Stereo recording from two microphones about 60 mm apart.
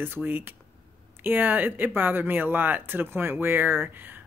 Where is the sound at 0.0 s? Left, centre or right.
Right.